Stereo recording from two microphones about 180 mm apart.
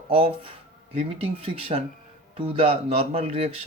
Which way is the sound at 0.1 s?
30° right (ahead or behind).